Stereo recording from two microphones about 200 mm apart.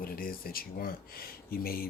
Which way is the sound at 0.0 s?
45° left (ahead or behind).